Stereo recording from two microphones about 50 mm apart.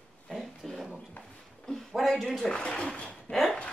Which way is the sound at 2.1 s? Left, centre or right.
Centre.